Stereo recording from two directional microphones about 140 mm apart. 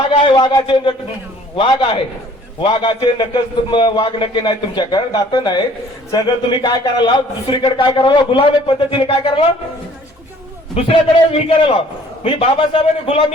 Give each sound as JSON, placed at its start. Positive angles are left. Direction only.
{"t": 0.1, "sound": "a man's voice", "side_deg": 35}
{"t": 10.8, "sound": "a man's voice", "side_deg": 45}